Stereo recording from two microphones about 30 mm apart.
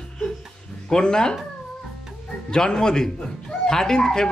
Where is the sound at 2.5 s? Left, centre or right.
Left.